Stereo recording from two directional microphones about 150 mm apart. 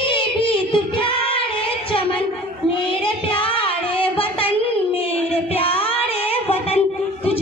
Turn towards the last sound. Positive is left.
turn(degrees=40)  # may be behind; listen again after turning